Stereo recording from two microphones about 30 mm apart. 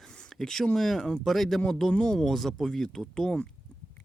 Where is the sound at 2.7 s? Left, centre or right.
Centre.